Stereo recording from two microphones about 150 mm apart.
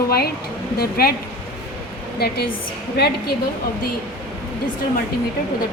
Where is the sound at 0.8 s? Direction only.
90° left.